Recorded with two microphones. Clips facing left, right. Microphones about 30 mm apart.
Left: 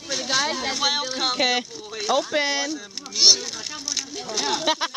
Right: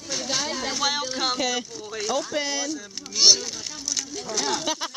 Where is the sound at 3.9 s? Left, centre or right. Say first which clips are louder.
Even; centre.